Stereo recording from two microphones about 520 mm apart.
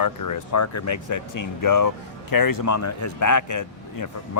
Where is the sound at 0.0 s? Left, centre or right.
Left.